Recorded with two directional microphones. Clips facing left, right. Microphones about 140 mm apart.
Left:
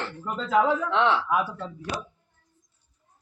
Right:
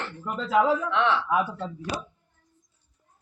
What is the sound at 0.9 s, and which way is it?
Speech, 30° left (ahead or behind).